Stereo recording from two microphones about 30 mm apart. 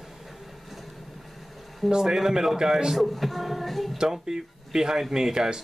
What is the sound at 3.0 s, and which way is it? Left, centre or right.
Speech, centre.